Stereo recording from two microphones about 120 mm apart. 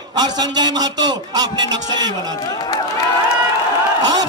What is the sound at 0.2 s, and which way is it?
A man's voice, 35° right (ahead or behind).